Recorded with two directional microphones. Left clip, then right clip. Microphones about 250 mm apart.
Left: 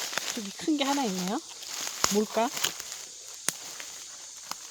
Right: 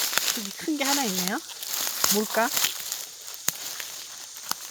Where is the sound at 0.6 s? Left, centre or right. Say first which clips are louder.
Left 1 dB; centre.